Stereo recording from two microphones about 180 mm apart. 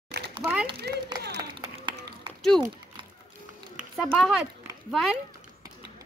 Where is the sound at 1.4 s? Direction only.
25° right (ahead or behind).